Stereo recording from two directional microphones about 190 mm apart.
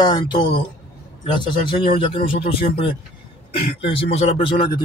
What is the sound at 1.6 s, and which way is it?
Speech, 25° left (ahead or behind).